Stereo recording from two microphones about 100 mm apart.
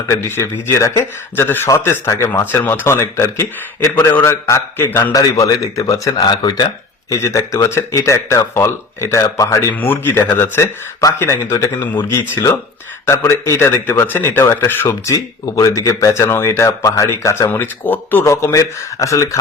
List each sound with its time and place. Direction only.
0.1 s speech: 25° left (ahead or behind)
5.1 s speech: 40° left (ahead or behind)
7.1 s speech: 30° left (ahead or behind)
18.3 s speech: 30° left (ahead or behind)